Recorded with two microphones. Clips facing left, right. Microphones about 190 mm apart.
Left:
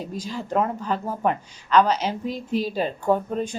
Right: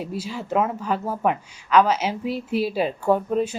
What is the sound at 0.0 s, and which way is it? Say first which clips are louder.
Speech: right 1 dB; 10° right (ahead or behind).